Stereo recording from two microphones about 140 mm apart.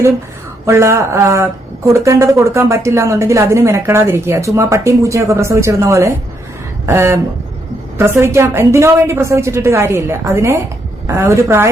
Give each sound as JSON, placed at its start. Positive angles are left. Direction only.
{"t": 0.6, "sound": "speech", "side_deg": -20}